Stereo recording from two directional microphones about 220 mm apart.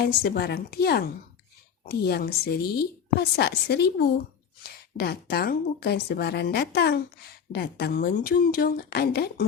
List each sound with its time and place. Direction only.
0.0 s a woman's voice: 45° left (ahead or behind)